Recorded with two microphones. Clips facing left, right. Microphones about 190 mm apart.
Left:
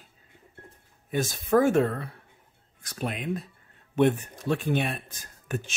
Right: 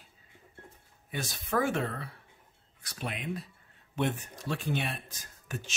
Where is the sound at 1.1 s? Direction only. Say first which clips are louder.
Left 9 dB; 45° left (ahead or behind).